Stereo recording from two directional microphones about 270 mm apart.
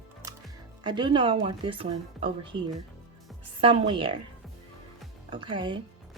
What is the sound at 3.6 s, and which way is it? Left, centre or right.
Speech, right.